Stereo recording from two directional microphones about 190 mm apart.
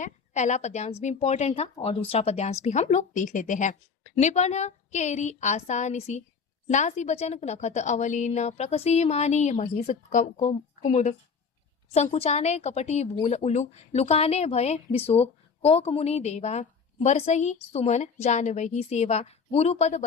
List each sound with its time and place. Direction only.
0.0 s a woman's voice: 40° left (ahead or behind)